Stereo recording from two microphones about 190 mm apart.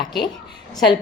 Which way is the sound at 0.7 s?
25° left (ahead or behind).